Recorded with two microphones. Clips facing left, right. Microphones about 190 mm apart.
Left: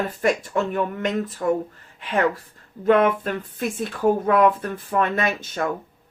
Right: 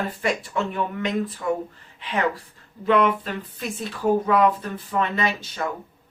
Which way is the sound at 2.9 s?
50° left (ahead or behind).